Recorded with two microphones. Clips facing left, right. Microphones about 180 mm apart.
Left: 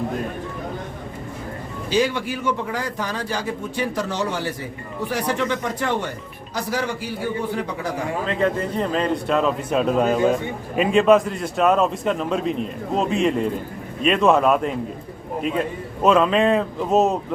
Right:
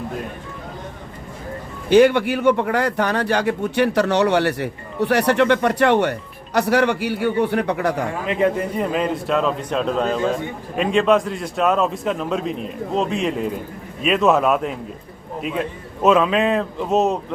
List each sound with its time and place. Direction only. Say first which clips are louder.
1.9 s a man's voice: right 8 dB; 60° right (ahead or behind)
8.3 s a man's voice: right 3 dB; 15° right (ahead or behind)